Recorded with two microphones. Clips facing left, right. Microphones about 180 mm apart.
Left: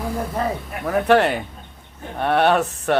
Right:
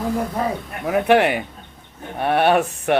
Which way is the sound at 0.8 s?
15° right (ahead or behind).